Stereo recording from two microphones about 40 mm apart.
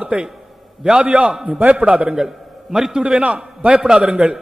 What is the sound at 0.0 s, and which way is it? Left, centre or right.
A man's voice, right.